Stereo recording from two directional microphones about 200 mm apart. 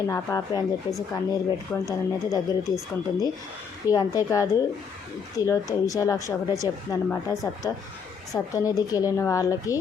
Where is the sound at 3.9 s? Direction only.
20° left (ahead or behind).